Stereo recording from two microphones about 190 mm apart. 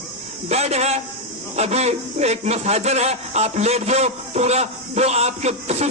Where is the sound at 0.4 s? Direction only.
35° right (ahead or behind).